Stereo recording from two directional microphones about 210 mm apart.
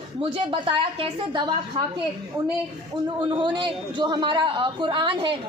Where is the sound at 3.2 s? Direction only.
20° right (ahead or behind).